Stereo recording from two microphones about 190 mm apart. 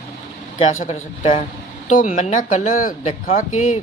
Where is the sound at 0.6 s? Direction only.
40° left (ahead or behind).